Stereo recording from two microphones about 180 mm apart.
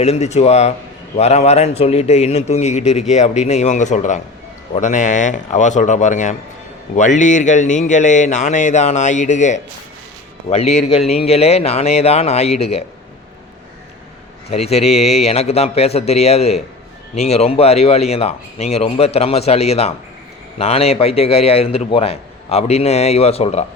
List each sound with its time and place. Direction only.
0.0 s a man's voice: 40° left (ahead or behind)
14.5 s a man's voice: 35° left (ahead or behind)